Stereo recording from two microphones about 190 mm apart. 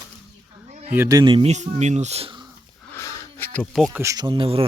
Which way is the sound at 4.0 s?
20° right (ahead or behind).